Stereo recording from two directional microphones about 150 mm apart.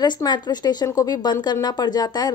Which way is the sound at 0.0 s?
30° left (ahead or behind).